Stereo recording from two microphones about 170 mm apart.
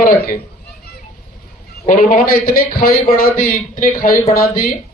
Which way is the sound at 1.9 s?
55° left (ahead or behind).